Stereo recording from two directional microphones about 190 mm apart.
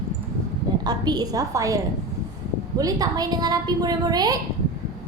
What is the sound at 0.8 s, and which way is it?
Speech, 20° right (ahead or behind).